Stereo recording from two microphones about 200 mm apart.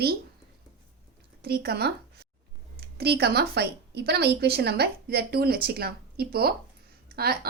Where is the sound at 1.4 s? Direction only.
50° right (ahead or behind).